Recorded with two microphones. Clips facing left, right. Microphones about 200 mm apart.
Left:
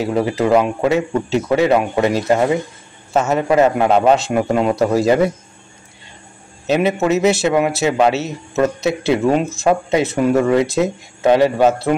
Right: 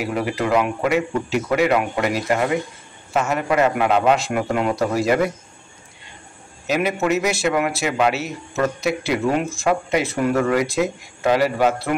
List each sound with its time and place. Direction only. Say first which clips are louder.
0.0 s a man's voice: left 5 dB; 25° left (ahead or behind)
6.7 s a man's voice: left 4 dB; 25° left (ahead or behind)